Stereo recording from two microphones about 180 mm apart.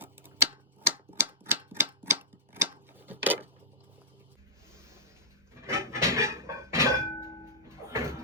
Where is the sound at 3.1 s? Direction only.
10° right (ahead or behind).